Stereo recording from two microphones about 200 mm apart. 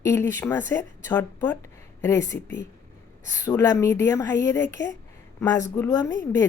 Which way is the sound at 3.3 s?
15° left (ahead or behind).